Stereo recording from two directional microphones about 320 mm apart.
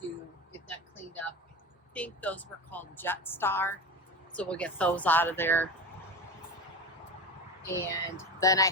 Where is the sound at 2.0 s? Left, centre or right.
Centre.